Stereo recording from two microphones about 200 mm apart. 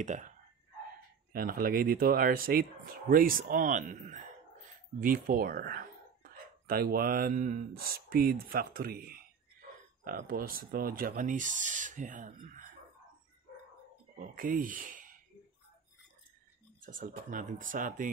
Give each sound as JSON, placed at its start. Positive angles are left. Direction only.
{"t": 0.0, "sound": "speech", "side_deg": -35}
{"t": 1.3, "sound": "speech", "side_deg": -45}
{"t": 14.1, "sound": "speech", "side_deg": -45}
{"t": 16.8, "sound": "speech", "side_deg": -40}